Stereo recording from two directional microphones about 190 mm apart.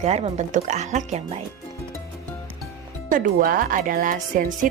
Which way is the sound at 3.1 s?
45° right (ahead or behind).